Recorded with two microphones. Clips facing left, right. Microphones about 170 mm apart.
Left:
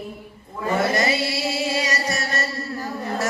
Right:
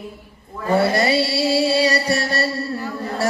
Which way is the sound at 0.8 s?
35° right (ahead or behind).